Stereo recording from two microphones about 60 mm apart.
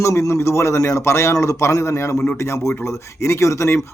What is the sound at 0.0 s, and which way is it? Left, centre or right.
Speech, left.